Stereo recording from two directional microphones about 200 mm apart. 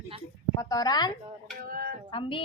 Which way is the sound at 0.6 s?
20° left (ahead or behind).